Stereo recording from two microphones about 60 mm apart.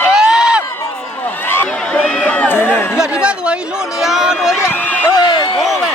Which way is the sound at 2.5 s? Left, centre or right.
Left.